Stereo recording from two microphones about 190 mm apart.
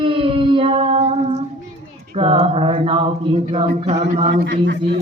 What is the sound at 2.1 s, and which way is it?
Mantra, 30° right (ahead or behind).